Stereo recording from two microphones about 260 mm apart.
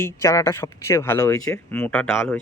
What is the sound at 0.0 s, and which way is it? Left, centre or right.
Speech, centre.